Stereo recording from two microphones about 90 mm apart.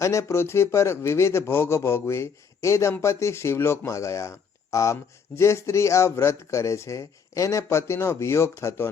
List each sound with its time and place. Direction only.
0.0 s speech: 35° left (ahead or behind)